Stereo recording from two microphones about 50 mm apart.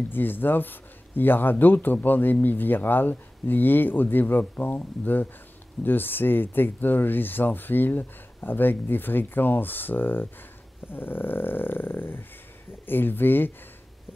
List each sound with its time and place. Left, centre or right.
0.1 s speech: left